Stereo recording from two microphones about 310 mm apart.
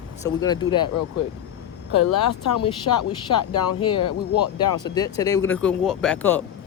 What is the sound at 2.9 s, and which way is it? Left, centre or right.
Speech, left.